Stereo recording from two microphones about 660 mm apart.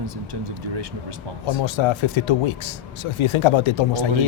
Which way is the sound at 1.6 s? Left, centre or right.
Left.